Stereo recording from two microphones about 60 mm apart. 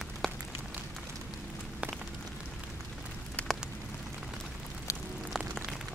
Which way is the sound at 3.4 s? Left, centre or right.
Left.